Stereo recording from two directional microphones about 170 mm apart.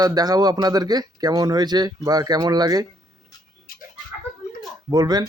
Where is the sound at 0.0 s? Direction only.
20° right (ahead or behind).